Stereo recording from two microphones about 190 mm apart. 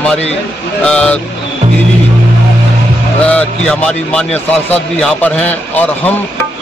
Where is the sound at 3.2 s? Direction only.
5° left (ahead or behind).